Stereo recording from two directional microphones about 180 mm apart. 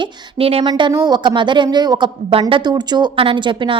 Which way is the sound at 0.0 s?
30° right (ahead or behind).